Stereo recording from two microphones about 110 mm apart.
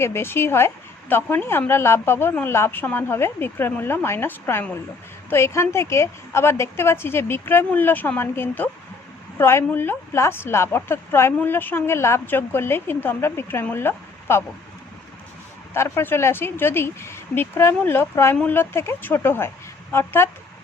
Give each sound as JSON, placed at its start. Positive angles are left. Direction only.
{"t": 0.0, "sound": "a woman's voice", "side_deg": 25}
{"t": 15.7, "sound": "a woman's voice", "side_deg": 20}